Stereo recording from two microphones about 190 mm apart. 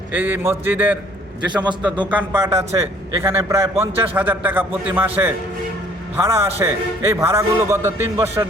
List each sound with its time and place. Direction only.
0.1 s a man's voice: 10° right (ahead or behind)
1.5 s a man's voice: 25° right (ahead or behind)
2.0 s a man's voice: 10° right (ahead or behind)